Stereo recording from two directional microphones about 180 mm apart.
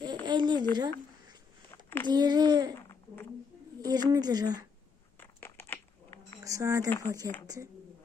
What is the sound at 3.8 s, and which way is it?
Speech, 20° right (ahead or behind).